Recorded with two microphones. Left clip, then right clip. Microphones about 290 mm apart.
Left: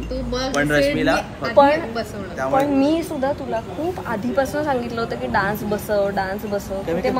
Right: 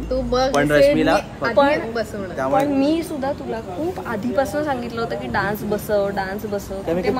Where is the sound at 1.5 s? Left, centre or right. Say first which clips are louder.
Left 3 dB; centre.